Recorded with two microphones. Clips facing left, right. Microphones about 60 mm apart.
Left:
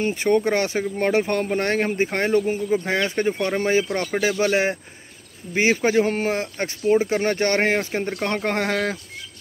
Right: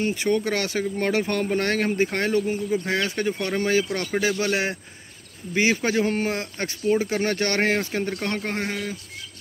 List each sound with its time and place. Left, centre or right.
0.0 s speech: left
8.5 s speech: left